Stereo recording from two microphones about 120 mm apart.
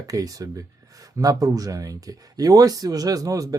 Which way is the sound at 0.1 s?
30° right (ahead or behind).